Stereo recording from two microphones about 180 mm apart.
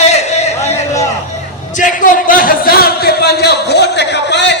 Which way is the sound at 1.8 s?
45° left (ahead or behind).